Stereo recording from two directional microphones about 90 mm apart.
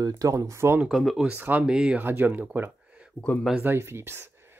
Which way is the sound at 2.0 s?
20° right (ahead or behind).